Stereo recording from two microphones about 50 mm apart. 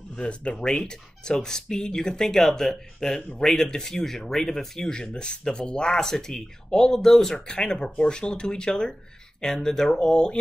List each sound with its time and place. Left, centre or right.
0.2 s speech: left; by 7.3 s centre
7.3 s speech: centre